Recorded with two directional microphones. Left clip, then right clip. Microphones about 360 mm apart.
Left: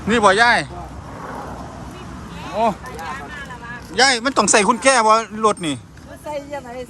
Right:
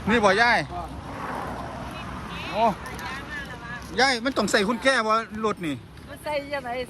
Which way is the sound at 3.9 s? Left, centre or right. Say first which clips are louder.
Left 7 dB; centre.